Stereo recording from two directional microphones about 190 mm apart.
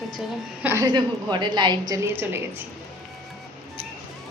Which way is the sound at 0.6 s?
15° right (ahead or behind).